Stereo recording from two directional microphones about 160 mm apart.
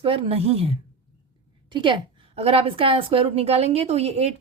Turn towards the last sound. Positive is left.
turn(degrees=-40)  # may be behind; listen again after turning